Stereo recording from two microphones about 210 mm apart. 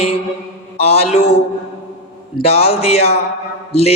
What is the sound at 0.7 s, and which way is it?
Speech, 30° left (ahead or behind).